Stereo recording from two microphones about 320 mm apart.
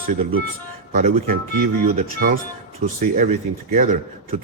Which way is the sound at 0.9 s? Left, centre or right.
Right.